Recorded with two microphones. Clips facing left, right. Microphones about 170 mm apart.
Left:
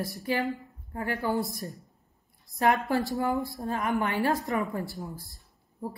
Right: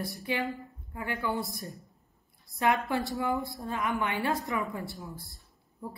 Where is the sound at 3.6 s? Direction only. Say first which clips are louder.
Left 3 dB; 45° left (ahead or behind).